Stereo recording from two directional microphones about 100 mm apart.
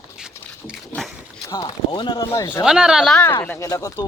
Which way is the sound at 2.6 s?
5° right (ahead or behind).